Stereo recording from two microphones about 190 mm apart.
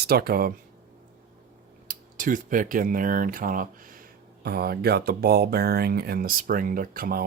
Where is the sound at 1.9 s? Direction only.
45° right (ahead or behind).